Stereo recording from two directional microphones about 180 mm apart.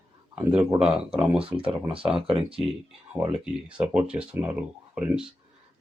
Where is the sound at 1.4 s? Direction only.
30° right (ahead or behind).